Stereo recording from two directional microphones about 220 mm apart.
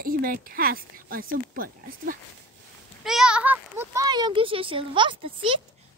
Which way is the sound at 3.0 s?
5° right (ahead or behind).